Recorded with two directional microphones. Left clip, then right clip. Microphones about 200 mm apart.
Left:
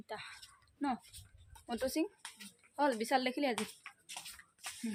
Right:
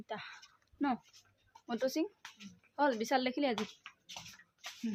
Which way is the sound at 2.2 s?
20° right (ahead or behind).